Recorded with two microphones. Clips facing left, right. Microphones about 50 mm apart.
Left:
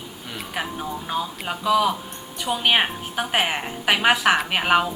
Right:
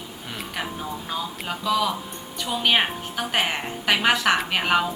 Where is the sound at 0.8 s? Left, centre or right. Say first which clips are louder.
Left 3 dB; centre.